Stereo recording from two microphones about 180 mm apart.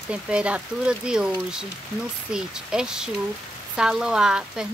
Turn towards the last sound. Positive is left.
turn(degrees=-5)  # may be behind; listen again after turning